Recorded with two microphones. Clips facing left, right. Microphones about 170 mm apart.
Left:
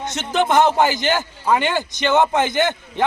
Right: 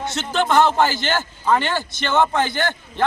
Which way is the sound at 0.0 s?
20° left (ahead or behind).